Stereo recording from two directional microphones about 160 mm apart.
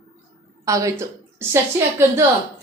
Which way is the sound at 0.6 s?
20° right (ahead or behind).